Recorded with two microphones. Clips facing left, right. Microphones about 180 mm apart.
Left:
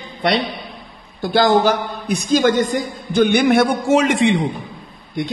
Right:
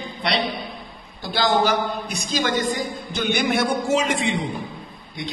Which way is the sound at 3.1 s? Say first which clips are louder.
Left 9 dB; 55° left (ahead or behind).